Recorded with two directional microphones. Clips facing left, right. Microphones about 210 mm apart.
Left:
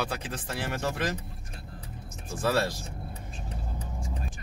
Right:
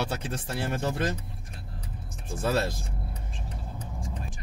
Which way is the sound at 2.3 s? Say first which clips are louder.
Even; 25° right (ahead or behind).